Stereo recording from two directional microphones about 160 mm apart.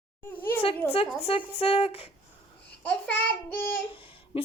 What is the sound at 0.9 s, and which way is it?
A woman's voice, 35° left (ahead or behind).